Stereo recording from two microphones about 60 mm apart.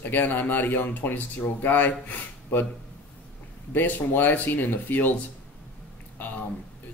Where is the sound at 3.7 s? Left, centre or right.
Left.